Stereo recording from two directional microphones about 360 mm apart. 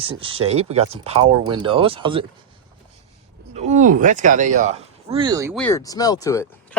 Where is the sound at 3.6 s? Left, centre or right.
Centre.